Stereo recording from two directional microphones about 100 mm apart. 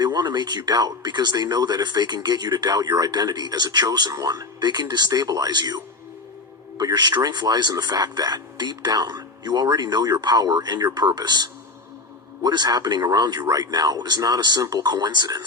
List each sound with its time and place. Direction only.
0.0 s speech: 45° right (ahead or behind)